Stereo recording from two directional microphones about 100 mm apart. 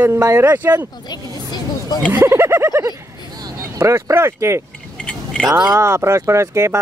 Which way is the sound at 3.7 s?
30° right (ahead or behind).